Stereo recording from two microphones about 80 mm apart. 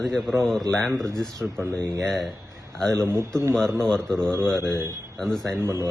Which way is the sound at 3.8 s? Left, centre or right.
Centre.